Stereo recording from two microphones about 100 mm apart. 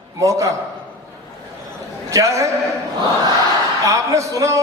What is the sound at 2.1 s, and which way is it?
Speech, 35° right (ahead or behind).